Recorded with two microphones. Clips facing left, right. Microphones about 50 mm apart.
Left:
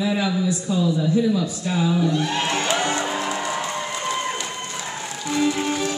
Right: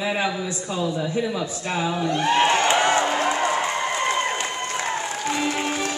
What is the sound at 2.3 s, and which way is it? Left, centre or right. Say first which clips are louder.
Music: right 4 dB; right.